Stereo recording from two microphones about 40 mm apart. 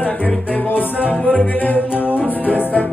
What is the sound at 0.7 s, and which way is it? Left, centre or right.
Music, left.